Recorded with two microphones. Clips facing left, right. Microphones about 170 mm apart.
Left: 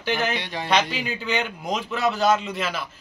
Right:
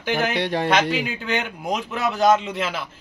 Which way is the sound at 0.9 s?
10° right (ahead or behind).